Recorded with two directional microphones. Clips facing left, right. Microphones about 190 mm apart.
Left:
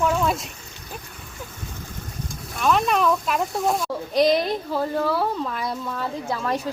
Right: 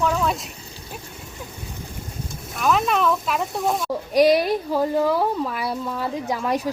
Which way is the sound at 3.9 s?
10° right (ahead or behind).